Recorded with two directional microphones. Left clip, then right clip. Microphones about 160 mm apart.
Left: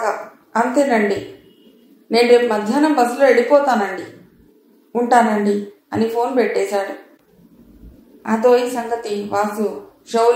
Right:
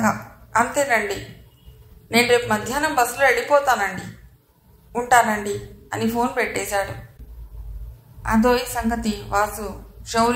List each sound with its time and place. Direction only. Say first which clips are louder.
0.0 s a woman's voice: left 1 dB; 35° right (ahead or behind)
5.5 s a woman's voice: left 7 dB; 35° right (ahead or behind)
8.2 s a woman's voice: left 5 dB; 35° right (ahead or behind)